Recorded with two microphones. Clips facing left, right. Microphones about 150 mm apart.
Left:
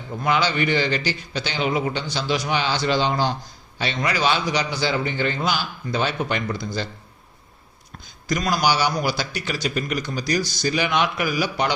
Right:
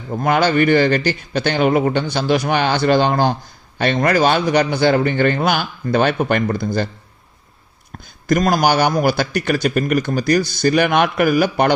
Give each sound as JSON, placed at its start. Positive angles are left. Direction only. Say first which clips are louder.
{"t": 0.1, "sound": "a man's voice", "louder": "right 6 dB", "side_deg": -50}
{"t": 8.0, "sound": "a man's voice", "louder": "right 8 dB", "side_deg": -50}